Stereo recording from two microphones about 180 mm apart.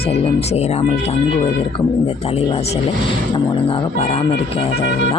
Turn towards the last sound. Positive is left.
turn(degrees=30)  # may be behind; listen again after turning